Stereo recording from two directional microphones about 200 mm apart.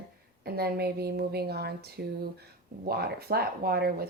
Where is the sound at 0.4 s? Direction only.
50° right (ahead or behind).